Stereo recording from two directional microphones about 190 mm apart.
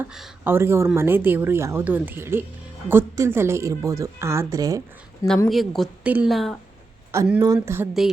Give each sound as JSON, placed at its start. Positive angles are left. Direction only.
{"t": 0.0, "sound": "a woman's voice", "side_deg": -5}
{"t": 5.5, "sound": "a woman's voice", "side_deg": 0}
{"t": 7.1, "sound": "a woman's voice", "side_deg": -10}